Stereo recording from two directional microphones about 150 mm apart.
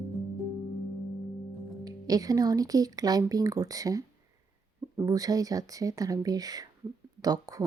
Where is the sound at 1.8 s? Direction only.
25° right (ahead or behind).